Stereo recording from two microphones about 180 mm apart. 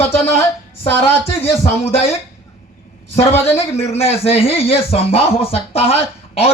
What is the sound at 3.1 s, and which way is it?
Speech, 35° left (ahead or behind).